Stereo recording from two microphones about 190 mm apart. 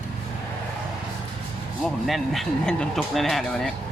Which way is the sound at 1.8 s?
Centre (ahead or behind).